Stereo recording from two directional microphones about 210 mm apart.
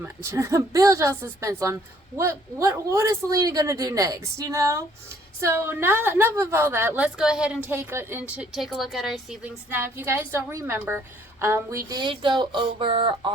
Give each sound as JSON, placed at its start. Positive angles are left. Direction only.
{"t": 0.0, "sound": "a woman's voice", "side_deg": -15}